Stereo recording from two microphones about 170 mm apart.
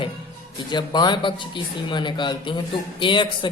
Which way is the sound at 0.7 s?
25° left (ahead or behind).